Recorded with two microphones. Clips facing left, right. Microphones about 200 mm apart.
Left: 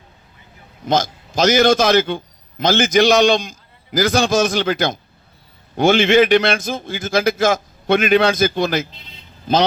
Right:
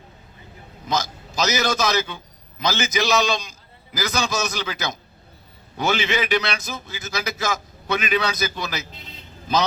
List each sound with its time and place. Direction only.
1.4 s a man's voice: 55° left (ahead or behind)